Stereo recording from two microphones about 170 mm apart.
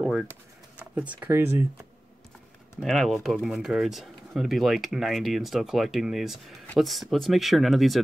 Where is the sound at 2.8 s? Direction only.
Centre (ahead or behind).